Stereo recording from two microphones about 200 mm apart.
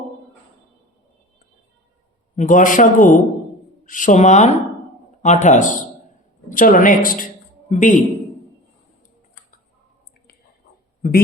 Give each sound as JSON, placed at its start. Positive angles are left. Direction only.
{"t": 2.3, "sound": "a woman's voice", "side_deg": 40}